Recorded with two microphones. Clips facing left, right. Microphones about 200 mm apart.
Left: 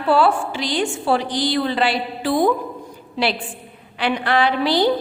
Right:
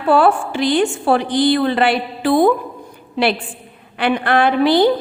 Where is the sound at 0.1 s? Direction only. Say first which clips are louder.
Right 3 dB; 50° right (ahead or behind).